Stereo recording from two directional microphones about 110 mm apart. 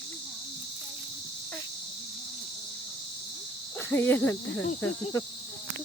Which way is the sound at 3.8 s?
20° left (ahead or behind).